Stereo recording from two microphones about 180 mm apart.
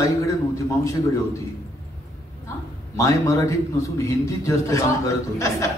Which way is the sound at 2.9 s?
15° left (ahead or behind).